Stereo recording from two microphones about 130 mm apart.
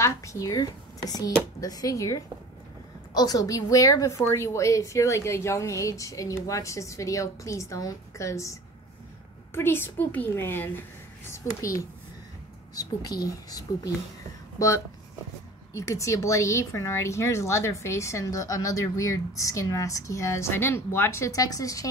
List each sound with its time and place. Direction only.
0.0 s a woman's voice: 25° left (ahead or behind)